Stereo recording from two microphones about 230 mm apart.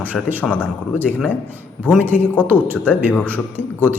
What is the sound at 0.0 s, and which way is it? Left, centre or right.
Speech, centre.